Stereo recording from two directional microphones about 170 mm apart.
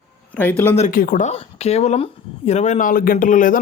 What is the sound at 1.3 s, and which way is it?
A man's voice, 40° left (ahead or behind).